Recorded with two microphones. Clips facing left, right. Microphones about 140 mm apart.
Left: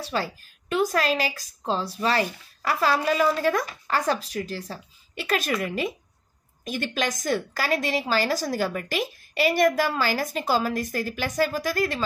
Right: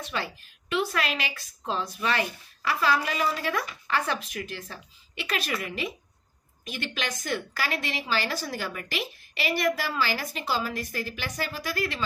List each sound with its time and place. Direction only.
0.0 s a woman's voice: 40° left (ahead or behind)